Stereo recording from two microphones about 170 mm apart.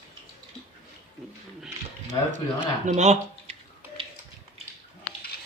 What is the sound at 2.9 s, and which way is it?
Speech, 40° right (ahead or behind).